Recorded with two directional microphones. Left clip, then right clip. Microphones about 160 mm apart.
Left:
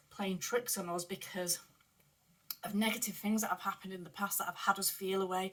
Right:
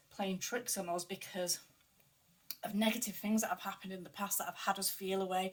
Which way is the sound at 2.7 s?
30° right (ahead or behind).